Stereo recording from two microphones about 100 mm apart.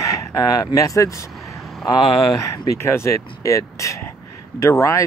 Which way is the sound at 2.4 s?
30° left (ahead or behind).